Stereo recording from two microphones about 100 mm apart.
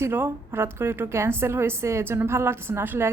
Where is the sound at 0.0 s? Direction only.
25° right (ahead or behind).